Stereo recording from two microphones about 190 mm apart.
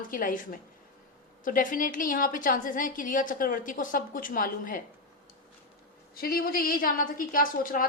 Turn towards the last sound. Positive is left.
turn(degrees=45)  # may be behind; listen again after turning